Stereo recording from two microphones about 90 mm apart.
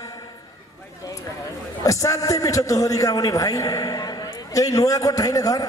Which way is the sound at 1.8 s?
40° left (ahead or behind).